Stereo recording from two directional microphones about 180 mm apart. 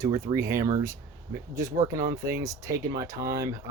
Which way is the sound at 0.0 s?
20° right (ahead or behind).